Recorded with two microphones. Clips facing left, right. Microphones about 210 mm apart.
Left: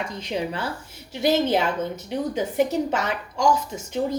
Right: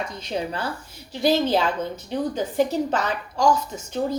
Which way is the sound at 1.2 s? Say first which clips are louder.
Even; 20° left (ahead or behind).